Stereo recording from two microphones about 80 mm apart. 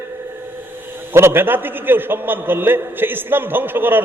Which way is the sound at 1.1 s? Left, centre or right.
Right.